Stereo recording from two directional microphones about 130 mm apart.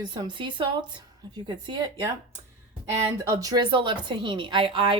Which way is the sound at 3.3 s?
30° right (ahead or behind).